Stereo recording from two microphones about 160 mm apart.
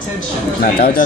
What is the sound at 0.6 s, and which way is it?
Speech, 60° left (ahead or behind).